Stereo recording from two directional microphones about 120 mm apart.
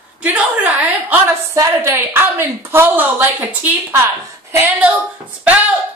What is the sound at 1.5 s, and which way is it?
A woman's voice, 25° right (ahead or behind).